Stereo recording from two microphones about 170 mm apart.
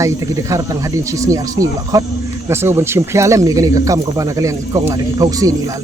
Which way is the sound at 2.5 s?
15° right (ahead or behind).